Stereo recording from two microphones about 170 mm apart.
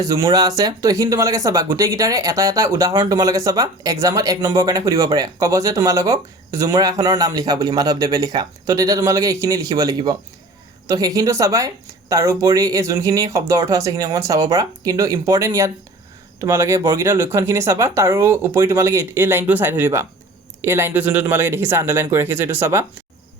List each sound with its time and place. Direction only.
0.0 s speech: 20° right (ahead or behind)